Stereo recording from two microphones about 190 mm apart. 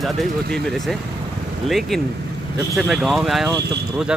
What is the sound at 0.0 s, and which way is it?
Speech, centre (ahead or behind).